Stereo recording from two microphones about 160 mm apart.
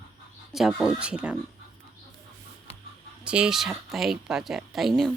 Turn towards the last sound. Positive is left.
turn(degrees=0)  # may be behind; listen again after turning